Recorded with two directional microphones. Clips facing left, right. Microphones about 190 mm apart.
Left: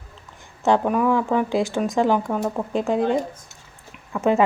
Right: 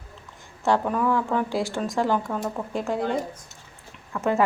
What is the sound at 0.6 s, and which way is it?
Speech, 15° left (ahead or behind).